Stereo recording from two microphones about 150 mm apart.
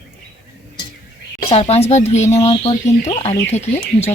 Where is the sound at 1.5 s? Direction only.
40° left (ahead or behind).